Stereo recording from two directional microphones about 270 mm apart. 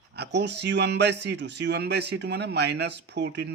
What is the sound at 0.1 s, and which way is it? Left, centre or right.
Speech, right.